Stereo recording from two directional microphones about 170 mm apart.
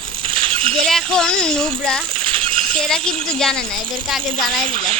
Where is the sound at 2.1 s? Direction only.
30° right (ahead or behind).